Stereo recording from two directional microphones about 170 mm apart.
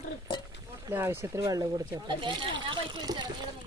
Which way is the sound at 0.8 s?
15° right (ahead or behind).